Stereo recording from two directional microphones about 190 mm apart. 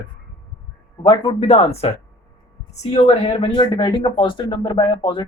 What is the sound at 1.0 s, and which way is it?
Speech, 30° left (ahead or behind).